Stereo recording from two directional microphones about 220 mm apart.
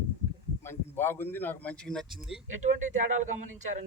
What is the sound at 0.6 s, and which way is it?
Speech, 10° left (ahead or behind).